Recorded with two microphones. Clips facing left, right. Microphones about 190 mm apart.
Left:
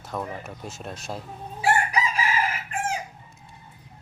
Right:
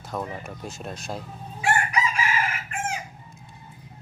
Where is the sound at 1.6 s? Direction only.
35° left (ahead or behind).